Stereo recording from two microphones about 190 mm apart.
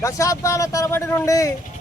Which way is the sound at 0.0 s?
15° left (ahead or behind).